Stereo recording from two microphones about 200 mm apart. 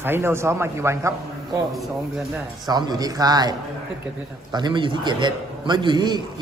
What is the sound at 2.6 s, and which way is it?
A man's voice, 20° right (ahead or behind).